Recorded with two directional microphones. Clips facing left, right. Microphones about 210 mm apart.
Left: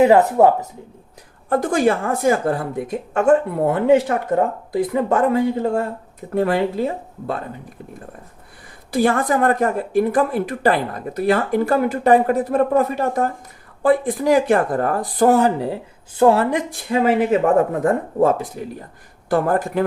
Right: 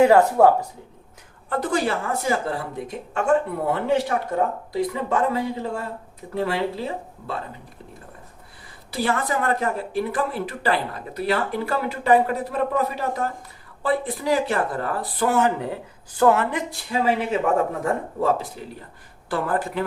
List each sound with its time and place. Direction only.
0.0 s speech: 20° left (ahead or behind)
1.5 s a woman's voice: 45° left (ahead or behind)
8.9 s a woman's voice: 50° left (ahead or behind)
16.6 s a woman's voice: 50° left (ahead or behind)